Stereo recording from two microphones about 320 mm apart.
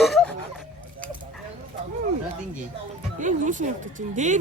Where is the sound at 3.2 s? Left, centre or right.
Right.